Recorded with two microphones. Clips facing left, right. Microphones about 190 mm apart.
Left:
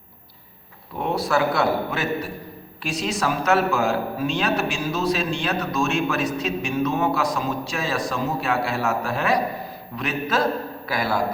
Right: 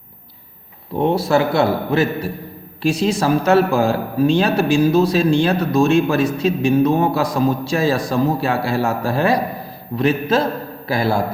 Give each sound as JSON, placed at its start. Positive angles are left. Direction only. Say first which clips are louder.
{"t": 0.9, "sound": "a man's voice", "louder": "right 6 dB", "side_deg": -25}